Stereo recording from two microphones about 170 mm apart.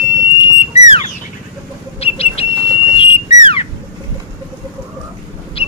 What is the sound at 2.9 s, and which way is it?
Whistle, 35° left (ahead or behind).